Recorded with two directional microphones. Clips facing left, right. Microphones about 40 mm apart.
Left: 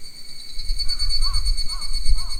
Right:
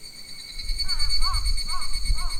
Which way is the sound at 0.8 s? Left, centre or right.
Right.